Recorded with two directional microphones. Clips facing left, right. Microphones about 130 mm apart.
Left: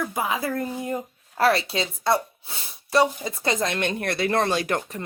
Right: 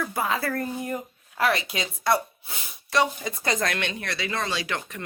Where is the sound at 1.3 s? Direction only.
35° left (ahead or behind).